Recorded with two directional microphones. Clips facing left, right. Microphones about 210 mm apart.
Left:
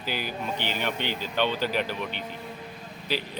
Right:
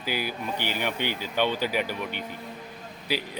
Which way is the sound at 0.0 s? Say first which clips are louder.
Right 1 dB; 10° right (ahead or behind).